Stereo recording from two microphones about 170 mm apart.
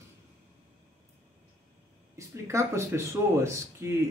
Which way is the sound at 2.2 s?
15° right (ahead or behind).